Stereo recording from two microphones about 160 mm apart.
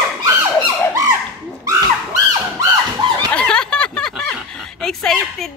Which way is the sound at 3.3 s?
5° left (ahead or behind).